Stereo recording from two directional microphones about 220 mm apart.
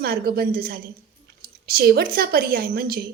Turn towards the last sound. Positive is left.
turn(degrees=-40)  # may be behind; listen again after turning